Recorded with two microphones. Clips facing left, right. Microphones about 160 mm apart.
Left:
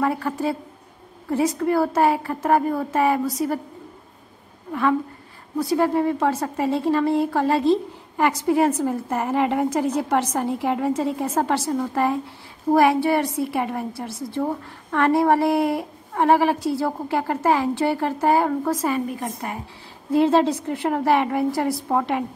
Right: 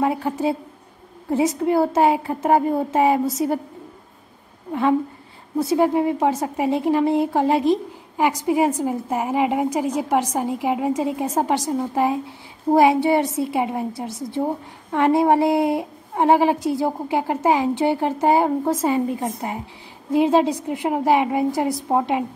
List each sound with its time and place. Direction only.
0.0 s a woman's voice: 20° right (ahead or behind)
1.6 s a woman's voice: 20° right (ahead or behind)
5.6 s a woman's voice: 20° right (ahead or behind)